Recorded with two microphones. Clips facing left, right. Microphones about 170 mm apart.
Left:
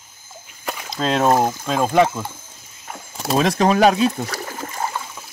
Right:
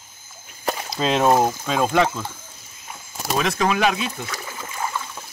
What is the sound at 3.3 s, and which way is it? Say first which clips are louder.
Speech: left 5 dB; 35° left (ahead or behind).